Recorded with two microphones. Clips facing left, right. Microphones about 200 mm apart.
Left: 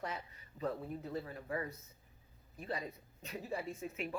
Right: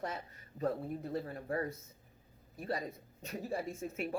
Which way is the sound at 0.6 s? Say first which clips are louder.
Right 4 dB; 45° right (ahead or behind).